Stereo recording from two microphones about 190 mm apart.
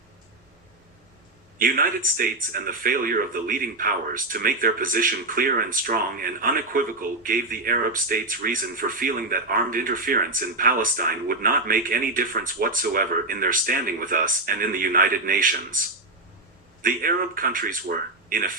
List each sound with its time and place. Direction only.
1.5 s speech: 50° right (ahead or behind)
16.8 s speech: 45° right (ahead or behind)